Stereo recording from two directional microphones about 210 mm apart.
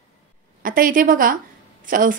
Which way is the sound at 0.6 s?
40° right (ahead or behind).